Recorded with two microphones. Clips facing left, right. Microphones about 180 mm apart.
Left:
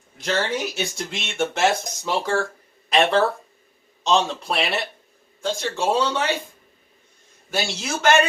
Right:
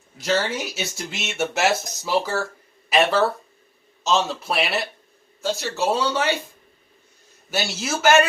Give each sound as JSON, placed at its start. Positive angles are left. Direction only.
{"t": 0.2, "sound": "speech", "side_deg": 0}
{"t": 7.5, "sound": "speech", "side_deg": -5}